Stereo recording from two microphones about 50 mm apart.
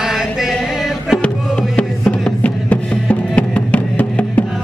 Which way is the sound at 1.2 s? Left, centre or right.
Left.